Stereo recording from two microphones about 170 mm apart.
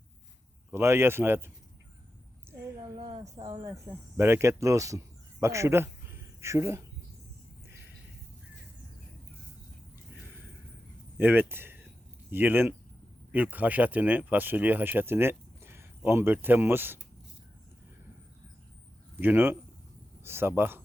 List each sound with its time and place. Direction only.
0.7 s speech: 15° right (ahead or behind)
2.5 s a sound: 15° right (ahead or behind)
3.1 s speech: 40° right (ahead or behind)
3.4 s speech: 20° right (ahead or behind)
11.2 s speech: 10° right (ahead or behind)
19.2 s speech: 10° right (ahead or behind)